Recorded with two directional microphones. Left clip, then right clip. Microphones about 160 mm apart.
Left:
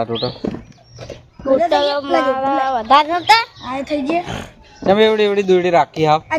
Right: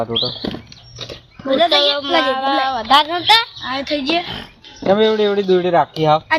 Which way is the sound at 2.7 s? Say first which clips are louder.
Left 2 dB; 90° left.